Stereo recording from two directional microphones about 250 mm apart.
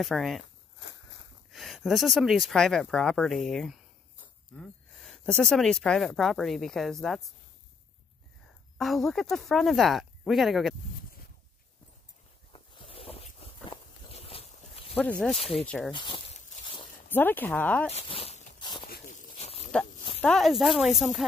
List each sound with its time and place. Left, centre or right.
0.0 s speech: centre
1.5 s speech: centre
8.7 s speech: centre
12.5 s zipper: left
15.0 s speech: centre
15.3 s speech: left
15.6 s speech: centre
15.9 s a sound: centre
17.1 s speech: centre
17.8 s walk: left
18.9 s a sound: left
20.2 s speech: centre